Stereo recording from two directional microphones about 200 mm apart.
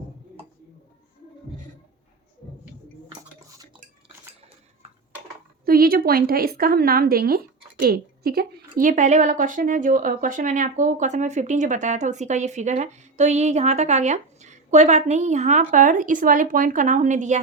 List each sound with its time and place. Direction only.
5.6 s a woman's voice: 45° right (ahead or behind)